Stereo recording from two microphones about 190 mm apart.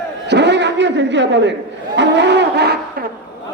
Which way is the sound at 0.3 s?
65° right (ahead or behind).